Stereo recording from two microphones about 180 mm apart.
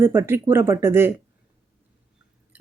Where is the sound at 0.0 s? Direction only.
15° right (ahead or behind).